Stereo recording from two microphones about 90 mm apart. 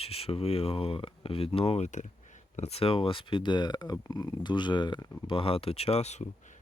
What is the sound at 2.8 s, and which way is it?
Speech, 90° left.